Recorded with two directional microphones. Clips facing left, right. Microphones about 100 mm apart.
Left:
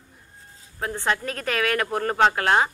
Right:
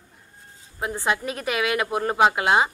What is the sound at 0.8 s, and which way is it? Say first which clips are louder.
A woman's voice: right 1 dB; 15° right (ahead or behind).